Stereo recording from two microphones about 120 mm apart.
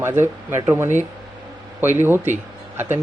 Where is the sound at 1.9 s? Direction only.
20° right (ahead or behind).